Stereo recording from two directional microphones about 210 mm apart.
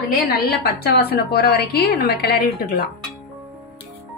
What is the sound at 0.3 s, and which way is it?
A woman's voice, 50° left (ahead or behind).